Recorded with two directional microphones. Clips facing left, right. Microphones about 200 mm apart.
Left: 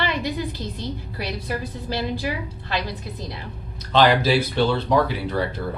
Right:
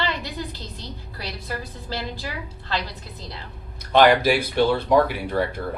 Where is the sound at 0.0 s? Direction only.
15° left (ahead or behind).